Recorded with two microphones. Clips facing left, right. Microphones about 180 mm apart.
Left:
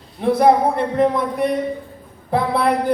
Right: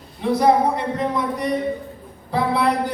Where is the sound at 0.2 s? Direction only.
55° left (ahead or behind).